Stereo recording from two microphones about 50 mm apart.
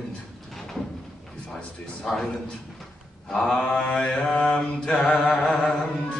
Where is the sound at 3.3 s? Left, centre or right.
Centre.